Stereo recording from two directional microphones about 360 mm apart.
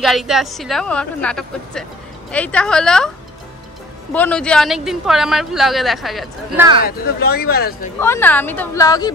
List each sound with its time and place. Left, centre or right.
0.0 s speech: centre
4.1 s speech: centre
6.8 s speech: left
8.0 s a woman's voice: centre